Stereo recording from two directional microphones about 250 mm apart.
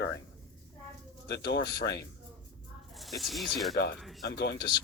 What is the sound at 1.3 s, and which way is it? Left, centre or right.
Speech, left.